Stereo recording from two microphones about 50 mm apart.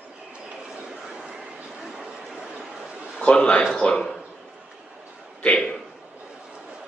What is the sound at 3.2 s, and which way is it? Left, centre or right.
Speech, left.